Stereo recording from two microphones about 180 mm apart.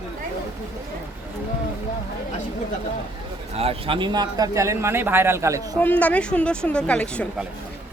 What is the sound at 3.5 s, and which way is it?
Speech, 30° right (ahead or behind).